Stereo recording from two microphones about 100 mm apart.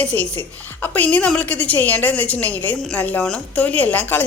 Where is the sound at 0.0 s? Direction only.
15° left (ahead or behind).